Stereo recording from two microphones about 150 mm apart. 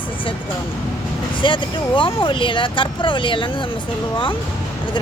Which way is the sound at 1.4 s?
35° left (ahead or behind).